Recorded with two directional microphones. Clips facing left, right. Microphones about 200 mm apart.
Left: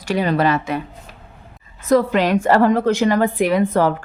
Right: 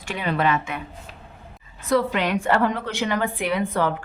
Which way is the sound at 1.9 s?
40° left (ahead or behind).